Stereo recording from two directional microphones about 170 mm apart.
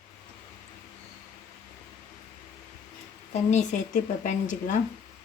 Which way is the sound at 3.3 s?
40° left (ahead or behind).